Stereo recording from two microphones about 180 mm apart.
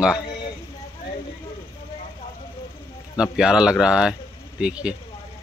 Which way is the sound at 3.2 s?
5° right (ahead or behind).